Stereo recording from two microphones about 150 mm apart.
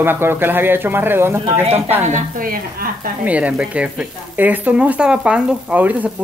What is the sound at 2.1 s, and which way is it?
Speech, 60° right (ahead or behind).